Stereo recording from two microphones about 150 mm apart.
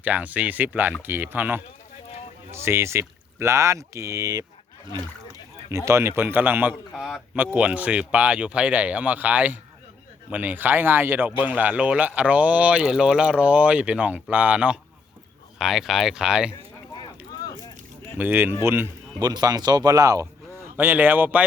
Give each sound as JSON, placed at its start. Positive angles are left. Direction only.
{"t": 0.0, "sound": "speech", "side_deg": -10}
{"t": 5.7, "sound": "speech", "side_deg": -20}
{"t": 18.2, "sound": "speech", "side_deg": -15}
{"t": 19.2, "sound": "speech", "side_deg": -25}
{"t": 20.7, "sound": "speech", "side_deg": -10}